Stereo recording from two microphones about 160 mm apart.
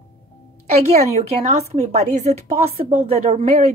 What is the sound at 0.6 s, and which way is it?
A woman's voice, 40° right (ahead or behind).